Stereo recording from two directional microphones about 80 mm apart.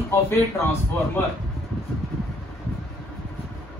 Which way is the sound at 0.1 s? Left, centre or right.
Left.